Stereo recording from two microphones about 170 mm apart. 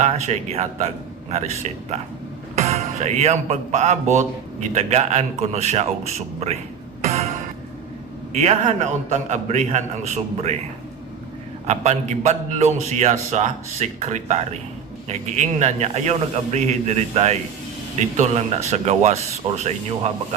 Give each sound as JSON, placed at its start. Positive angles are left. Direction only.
{"t": 0.0, "sound": "a man's voice", "side_deg": -40}
{"t": 7.0, "sound": "music", "side_deg": -40}
{"t": 8.4, "sound": "a man's voice", "side_deg": -40}
{"t": 11.7, "sound": "a man's voice", "side_deg": -40}
{"t": 18.7, "sound": "a man's voice", "side_deg": -40}